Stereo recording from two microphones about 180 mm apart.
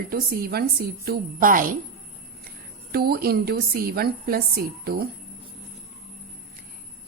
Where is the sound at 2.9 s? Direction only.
60° right (ahead or behind).